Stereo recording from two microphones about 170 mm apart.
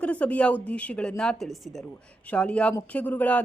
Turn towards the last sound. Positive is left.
turn(degrees=10)  # may be behind; listen again after turning